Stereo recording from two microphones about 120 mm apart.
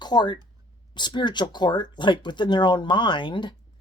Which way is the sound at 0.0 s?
35° left (ahead or behind).